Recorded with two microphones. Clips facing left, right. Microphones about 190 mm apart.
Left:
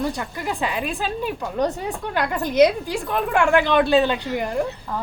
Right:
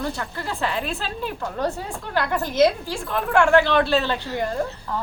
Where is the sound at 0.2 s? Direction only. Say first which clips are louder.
Left 2 dB; 15° left (ahead or behind).